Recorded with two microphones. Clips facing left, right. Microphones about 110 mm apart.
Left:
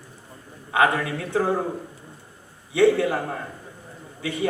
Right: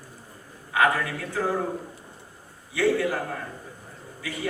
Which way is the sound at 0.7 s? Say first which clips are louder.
Left 2 dB; 25° left (ahead or behind).